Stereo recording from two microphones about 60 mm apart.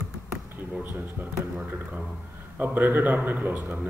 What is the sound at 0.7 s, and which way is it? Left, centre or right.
Speech, right.